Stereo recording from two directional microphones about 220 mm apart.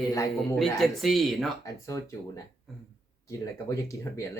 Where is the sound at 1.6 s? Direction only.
15° left (ahead or behind).